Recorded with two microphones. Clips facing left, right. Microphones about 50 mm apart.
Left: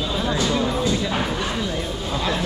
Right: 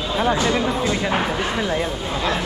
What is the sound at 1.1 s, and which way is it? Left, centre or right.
Speech, right.